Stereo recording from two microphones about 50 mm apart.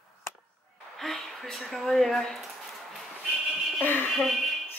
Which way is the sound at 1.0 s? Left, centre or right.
Centre.